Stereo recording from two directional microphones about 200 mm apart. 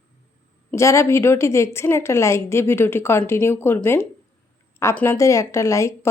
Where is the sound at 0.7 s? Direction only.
15° left (ahead or behind).